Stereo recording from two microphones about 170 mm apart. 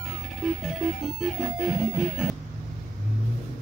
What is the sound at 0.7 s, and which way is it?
Music, centre (ahead or behind).